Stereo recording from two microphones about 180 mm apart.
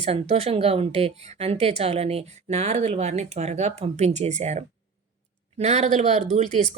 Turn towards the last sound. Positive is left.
turn(degrees=-35)  # may be behind; listen again after turning